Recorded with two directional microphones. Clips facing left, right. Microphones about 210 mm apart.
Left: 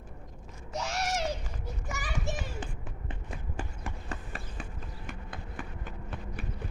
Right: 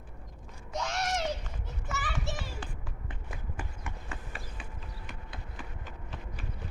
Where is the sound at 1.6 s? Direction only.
10° left (ahead or behind).